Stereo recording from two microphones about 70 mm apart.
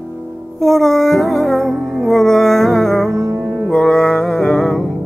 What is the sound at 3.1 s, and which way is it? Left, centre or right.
Music, right.